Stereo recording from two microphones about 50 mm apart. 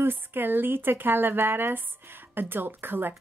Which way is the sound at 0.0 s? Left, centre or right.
Right.